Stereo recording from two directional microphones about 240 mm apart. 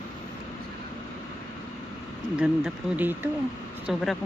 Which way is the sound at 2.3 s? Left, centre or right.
Centre.